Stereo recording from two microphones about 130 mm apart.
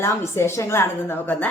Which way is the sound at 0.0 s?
20° left (ahead or behind).